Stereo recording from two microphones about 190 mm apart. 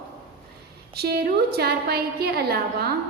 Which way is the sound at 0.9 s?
55° right (ahead or behind).